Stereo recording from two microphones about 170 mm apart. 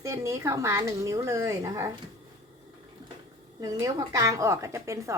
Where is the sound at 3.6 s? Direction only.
20° right (ahead or behind).